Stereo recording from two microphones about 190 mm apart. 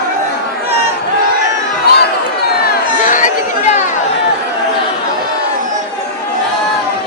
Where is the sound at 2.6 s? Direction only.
45° left (ahead or behind).